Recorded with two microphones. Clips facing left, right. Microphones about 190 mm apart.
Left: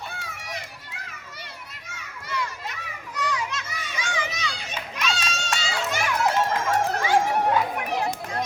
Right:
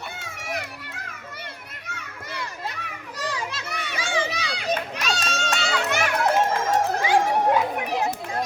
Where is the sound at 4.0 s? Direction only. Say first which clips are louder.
Right 4 dB; 30° right (ahead or behind).